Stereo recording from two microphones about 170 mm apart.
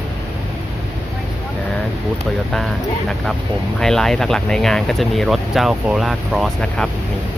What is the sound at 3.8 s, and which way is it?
Speech, 5° left (ahead or behind).